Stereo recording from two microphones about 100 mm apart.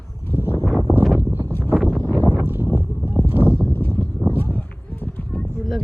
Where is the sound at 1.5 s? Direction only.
20° left (ahead or behind).